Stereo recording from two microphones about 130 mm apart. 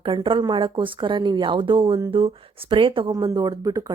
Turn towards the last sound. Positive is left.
turn(degrees=-25)  # may be behind; listen again after turning